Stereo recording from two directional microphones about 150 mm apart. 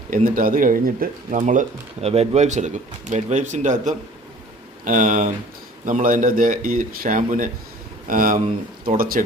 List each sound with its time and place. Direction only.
0.1 s speech: 70° right (ahead or behind)